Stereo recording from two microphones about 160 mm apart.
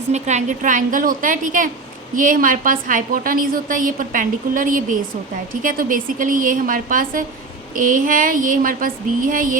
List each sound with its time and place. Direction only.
0.1 s a woman's voice: 45° right (ahead or behind)